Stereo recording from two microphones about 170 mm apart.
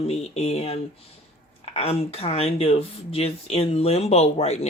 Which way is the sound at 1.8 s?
35° left (ahead or behind).